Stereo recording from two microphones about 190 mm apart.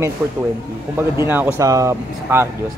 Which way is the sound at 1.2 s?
10° right (ahead or behind).